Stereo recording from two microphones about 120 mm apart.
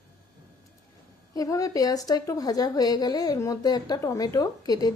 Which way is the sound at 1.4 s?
30° left (ahead or behind).